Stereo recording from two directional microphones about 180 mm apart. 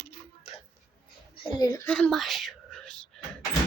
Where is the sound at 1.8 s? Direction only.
5° left (ahead or behind).